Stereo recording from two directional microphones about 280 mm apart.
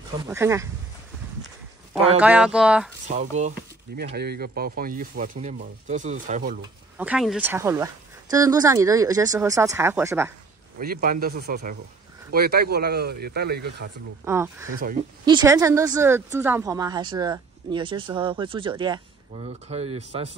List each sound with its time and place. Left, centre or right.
0.3 s speech: centre
2.0 s speech: centre
3.1 s speech: right
7.0 s speech: centre
10.8 s speech: right
14.2 s speech: centre